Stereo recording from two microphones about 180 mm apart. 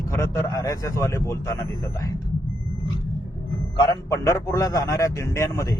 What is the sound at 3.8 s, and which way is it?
Speech, 20° left (ahead or behind).